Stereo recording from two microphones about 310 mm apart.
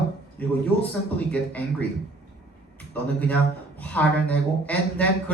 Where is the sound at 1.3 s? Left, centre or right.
Centre.